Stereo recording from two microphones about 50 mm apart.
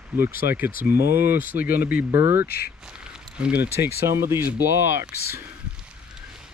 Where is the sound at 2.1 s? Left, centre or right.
Right.